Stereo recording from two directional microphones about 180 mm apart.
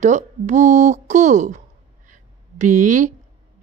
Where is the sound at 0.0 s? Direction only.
40° right (ahead or behind).